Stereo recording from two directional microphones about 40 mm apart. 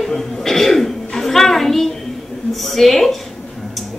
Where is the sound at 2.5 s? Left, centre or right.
Centre.